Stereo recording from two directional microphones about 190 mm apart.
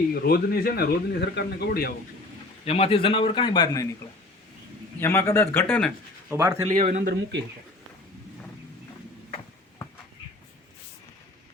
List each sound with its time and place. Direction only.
0.1 s speech: 50° left (ahead or behind)
2.6 s speech: 30° left (ahead or behind)
4.9 s speech: 10° left (ahead or behind)
6.3 s speech: 15° right (ahead or behind)
6.6 s a man's voice: 40° right (ahead or behind)
7.1 s speech: 65° right (ahead or behind)